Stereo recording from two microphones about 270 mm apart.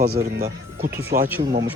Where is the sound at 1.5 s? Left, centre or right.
Centre.